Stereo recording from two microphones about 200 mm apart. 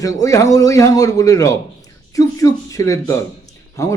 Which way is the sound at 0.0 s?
15° left (ahead or behind).